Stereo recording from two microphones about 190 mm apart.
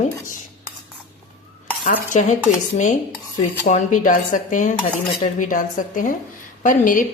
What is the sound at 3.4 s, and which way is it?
A woman's voice, 40° left (ahead or behind).